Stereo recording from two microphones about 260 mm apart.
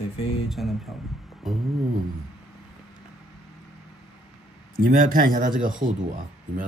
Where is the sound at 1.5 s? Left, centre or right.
Centre.